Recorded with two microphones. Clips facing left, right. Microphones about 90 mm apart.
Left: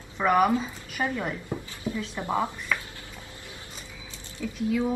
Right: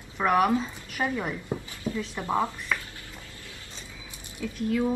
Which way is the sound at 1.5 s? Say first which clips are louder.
Right 1 dB; 20° right (ahead or behind).